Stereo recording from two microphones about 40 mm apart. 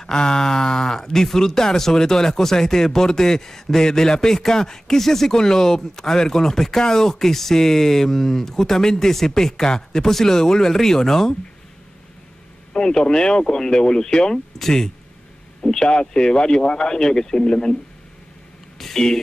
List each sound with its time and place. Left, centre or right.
0.0 s speech: centre
12.7 s speech: centre
18.8 s speech: centre